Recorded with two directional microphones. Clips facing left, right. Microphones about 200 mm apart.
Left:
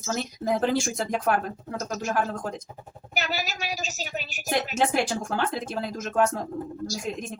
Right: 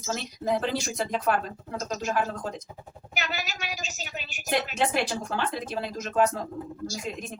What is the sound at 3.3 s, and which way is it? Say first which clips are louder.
Speech: left 3 dB; 40° left (ahead or behind).